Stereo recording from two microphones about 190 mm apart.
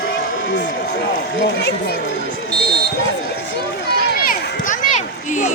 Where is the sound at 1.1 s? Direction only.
60° left (ahead or behind).